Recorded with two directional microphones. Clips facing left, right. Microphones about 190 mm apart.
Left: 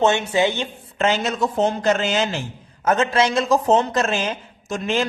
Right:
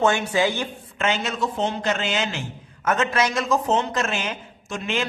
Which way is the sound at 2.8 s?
30° left (ahead or behind).